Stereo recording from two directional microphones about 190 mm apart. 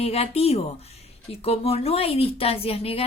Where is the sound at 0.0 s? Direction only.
30° left (ahead or behind).